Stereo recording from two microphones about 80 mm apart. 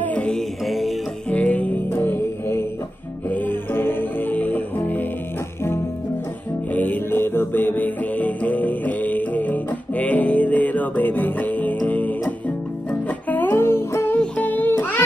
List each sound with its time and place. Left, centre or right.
0.0 s music: centre
1.3 s music: centre
6.7 s music: left
14.2 s music: centre